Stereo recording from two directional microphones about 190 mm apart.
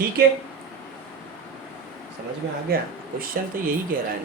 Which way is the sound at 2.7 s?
55° right (ahead or behind).